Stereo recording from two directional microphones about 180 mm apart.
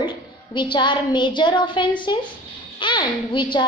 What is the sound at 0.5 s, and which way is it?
A woman's voice, 25° left (ahead or behind).